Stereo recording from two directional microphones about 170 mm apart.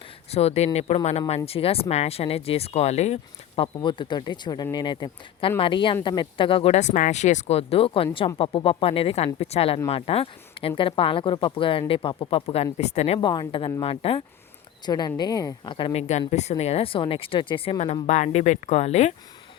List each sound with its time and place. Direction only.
0.3 s speech: 40° left (ahead or behind)
13.1 s a woman's voice: 25° left (ahead or behind)
18.0 s speech: 45° left (ahead or behind)